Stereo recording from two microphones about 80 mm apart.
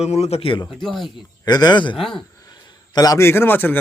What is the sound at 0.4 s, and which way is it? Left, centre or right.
Speech, left.